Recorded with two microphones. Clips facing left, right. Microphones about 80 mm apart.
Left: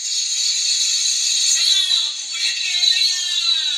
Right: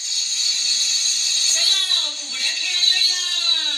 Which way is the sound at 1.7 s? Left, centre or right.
Right.